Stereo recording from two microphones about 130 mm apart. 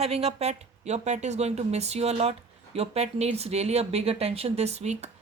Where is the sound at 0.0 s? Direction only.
55° right (ahead or behind).